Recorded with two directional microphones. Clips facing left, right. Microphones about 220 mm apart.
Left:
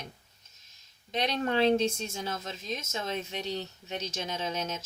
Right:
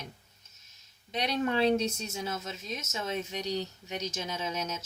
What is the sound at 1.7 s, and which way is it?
Speech, 30° left (ahead or behind).